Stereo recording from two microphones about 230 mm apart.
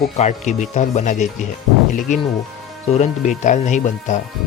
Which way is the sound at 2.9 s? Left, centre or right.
Left.